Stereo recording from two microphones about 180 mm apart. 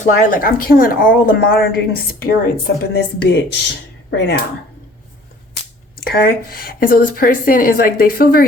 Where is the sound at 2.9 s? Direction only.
75° left (ahead or behind).